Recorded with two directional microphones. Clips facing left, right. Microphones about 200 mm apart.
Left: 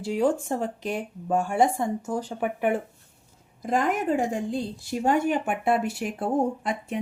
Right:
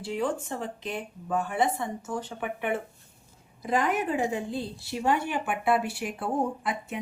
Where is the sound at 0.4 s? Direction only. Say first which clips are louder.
Left 6 dB; 45° left (ahead or behind).